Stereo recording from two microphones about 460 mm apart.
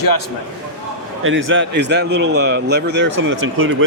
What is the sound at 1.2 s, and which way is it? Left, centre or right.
Speech, right.